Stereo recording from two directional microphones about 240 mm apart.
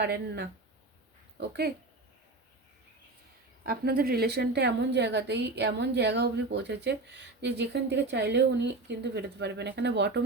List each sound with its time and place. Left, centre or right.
0.0 s a woman's voice: right
3.6 s a woman's voice: right